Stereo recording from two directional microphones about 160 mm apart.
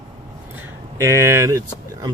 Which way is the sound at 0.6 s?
20° right (ahead or behind).